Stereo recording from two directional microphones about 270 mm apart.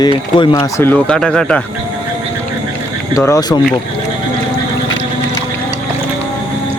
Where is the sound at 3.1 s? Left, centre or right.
Centre.